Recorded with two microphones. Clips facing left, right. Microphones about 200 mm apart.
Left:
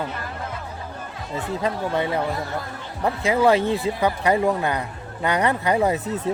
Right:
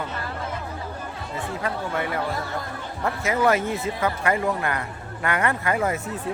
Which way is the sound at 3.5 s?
30° left (ahead or behind).